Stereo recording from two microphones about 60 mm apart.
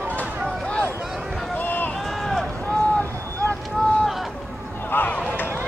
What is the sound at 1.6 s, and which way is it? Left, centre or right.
Run, left.